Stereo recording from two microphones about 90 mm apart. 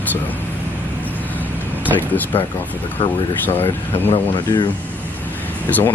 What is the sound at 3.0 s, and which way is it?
Speech, 65° left (ahead or behind).